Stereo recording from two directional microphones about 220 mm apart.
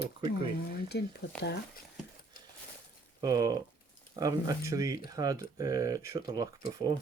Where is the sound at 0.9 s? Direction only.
50° left (ahead or behind).